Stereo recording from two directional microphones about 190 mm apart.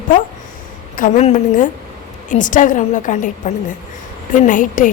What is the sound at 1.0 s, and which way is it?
A woman's voice, 35° left (ahead or behind).